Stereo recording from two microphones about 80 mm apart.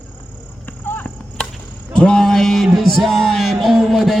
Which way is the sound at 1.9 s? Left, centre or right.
Centre.